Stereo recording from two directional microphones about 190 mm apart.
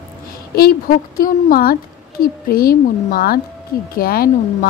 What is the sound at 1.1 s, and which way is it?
Speech, 45° left (ahead or behind).